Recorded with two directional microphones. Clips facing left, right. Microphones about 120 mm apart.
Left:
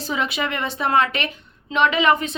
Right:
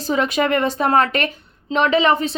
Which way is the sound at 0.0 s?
40° right (ahead or behind).